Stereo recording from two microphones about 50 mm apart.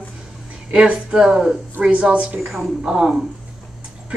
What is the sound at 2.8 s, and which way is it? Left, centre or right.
Speech, centre.